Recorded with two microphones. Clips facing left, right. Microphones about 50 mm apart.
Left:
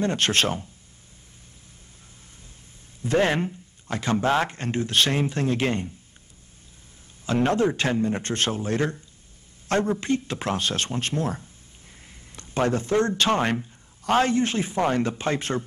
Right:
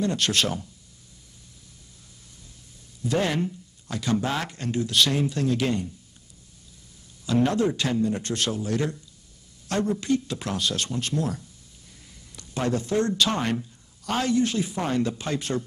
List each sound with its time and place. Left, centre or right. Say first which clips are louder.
0.0 s speech: left 2 dB; left
3.0 s speech: left 3 dB; left
7.2 s speech: left 1 dB; left